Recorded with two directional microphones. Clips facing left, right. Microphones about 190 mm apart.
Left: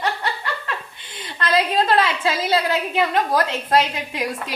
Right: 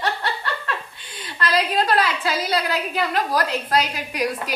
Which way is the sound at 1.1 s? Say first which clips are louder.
Left 2 dB; 25° left (ahead or behind).